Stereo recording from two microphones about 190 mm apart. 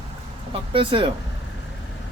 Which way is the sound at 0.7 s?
25° right (ahead or behind).